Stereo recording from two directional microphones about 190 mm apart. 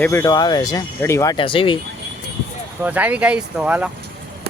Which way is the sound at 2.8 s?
10° right (ahead or behind).